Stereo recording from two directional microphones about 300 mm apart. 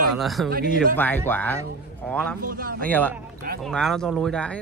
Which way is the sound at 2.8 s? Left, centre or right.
Centre.